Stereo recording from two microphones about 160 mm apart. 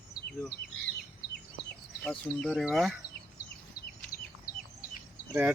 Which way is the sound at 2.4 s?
5° left (ahead or behind).